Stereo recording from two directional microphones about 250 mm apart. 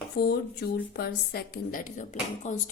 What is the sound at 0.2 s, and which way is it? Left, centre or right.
A woman's voice, left.